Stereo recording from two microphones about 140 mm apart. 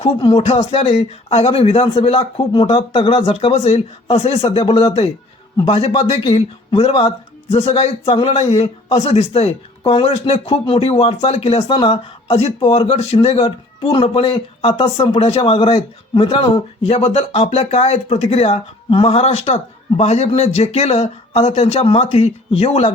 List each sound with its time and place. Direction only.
0.0 s speech: 45° left (ahead or behind)
4.6 s speech: 35° left (ahead or behind)